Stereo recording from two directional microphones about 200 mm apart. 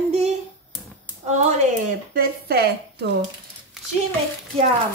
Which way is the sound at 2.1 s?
50° right (ahead or behind).